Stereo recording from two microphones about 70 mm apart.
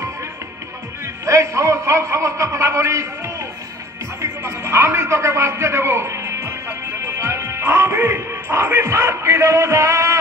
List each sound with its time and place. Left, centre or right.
1.0 s a man's voice: right